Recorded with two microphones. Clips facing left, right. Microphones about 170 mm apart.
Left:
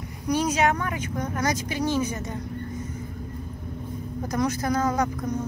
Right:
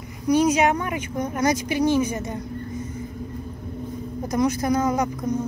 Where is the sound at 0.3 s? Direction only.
15° right (ahead or behind).